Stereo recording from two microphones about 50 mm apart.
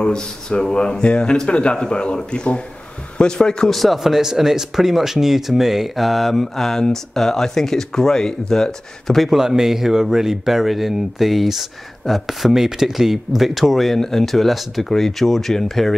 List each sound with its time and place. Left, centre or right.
0.0 s speech: centre
3.7 s speech: centre
9.3 s speech: centre